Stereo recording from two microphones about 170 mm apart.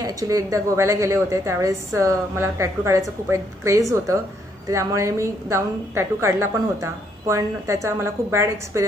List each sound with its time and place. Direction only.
0.0 s a woman's voice: 20° right (ahead or behind)